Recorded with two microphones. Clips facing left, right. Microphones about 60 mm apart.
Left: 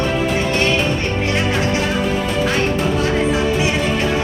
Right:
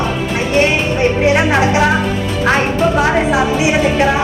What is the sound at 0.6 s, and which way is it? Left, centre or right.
Speech, centre.